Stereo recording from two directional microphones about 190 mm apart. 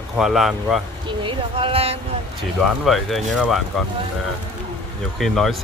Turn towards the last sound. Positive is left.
turn(degrees=0)  # may be behind; listen again after turning